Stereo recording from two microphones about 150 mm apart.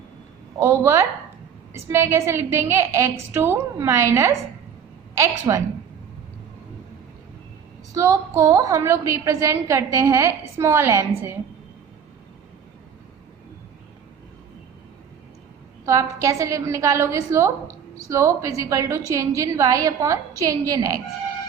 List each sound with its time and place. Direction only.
0.6 s a woman's voice: 20° right (ahead or behind)
7.9 s a woman's voice: 20° right (ahead or behind)
15.9 s a woman's voice: 20° right (ahead or behind)